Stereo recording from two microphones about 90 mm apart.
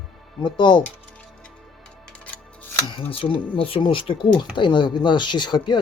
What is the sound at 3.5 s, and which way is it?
Speech, 90° left.